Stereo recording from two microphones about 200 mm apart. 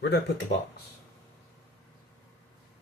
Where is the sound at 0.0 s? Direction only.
60° left (ahead or behind).